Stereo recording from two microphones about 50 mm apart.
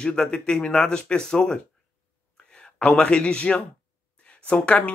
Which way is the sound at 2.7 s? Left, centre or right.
Left.